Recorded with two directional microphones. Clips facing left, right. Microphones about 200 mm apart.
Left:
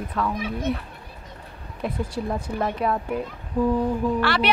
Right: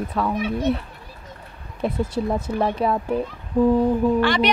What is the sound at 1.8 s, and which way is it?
A woman's voice, 25° right (ahead or behind).